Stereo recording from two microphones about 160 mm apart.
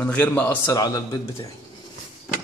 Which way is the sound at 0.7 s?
20° left (ahead or behind).